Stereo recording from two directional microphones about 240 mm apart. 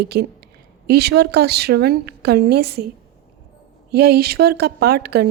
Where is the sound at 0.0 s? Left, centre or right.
Right.